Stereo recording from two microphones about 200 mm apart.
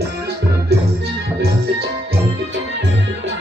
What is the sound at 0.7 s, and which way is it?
Music, 55° right (ahead or behind).